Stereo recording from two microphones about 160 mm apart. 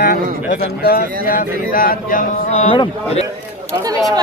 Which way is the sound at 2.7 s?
35° left (ahead or behind).